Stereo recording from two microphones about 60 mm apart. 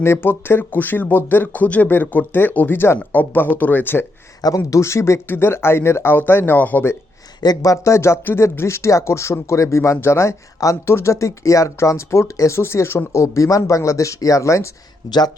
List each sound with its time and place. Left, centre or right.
0.0 s speech: left
4.4 s speech: left
5.3 s speech: left
7.5 s speech: left
10.8 s speech: left
13.1 s speech: left
15.0 s speech: left